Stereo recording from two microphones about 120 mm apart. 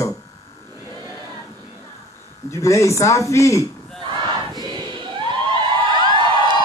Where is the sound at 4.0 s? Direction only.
40° right (ahead or behind).